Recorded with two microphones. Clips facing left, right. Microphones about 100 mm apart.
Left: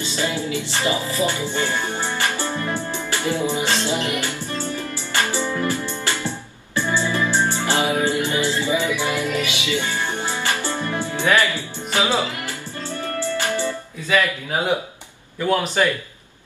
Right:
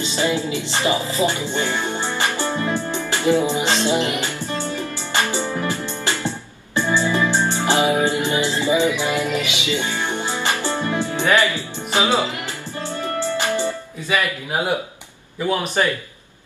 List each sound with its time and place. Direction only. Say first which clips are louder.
0.0 s music: right 3 dB; 20° right (ahead or behind)
15.3 s a man's voice: left 1 dB; 5° right (ahead or behind)